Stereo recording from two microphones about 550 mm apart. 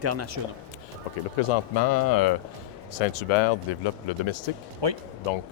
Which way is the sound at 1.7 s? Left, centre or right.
Left.